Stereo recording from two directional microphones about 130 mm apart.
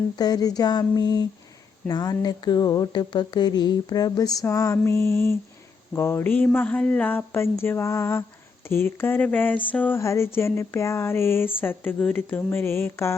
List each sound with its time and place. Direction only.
0.2 s speech: 30° left (ahead or behind)
1.9 s a sound: 30° left (ahead or behind)
5.9 s speech: 20° left (ahead or behind)